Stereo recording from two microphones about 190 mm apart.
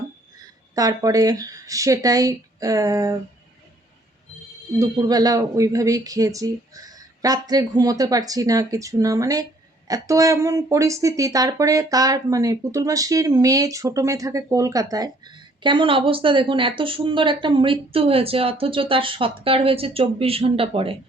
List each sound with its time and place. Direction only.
0.8 s speech: 20° right (ahead or behind)
4.8 s speech: 20° right (ahead or behind)